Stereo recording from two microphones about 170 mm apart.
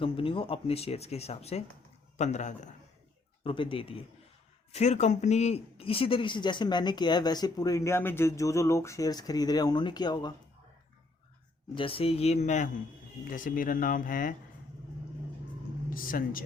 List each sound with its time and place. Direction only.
0.0 s a man's voice: 30° left (ahead or behind)
3.4 s speech: 30° left (ahead or behind)
11.7 s speech: 30° left (ahead or behind)
13.3 s speech: 55° left (ahead or behind)
15.9 s speech: 55° left (ahead or behind)